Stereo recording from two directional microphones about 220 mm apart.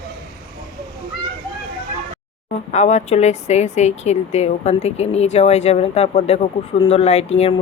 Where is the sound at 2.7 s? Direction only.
30° left (ahead or behind).